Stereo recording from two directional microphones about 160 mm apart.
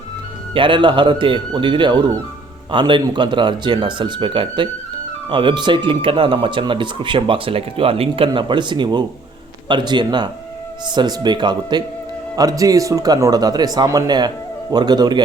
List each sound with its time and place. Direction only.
0.5 s speech: 30° right (ahead or behind)